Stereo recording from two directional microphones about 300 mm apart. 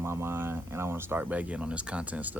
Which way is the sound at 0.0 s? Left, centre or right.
Centre.